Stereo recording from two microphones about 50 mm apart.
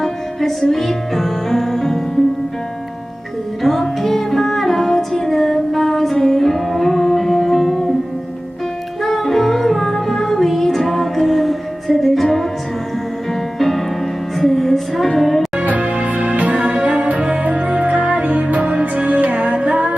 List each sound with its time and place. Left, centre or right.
0.0 s music: centre
3.6 s music: centre
9.0 s music: centre
13.6 s music: centre
15.8 s music: right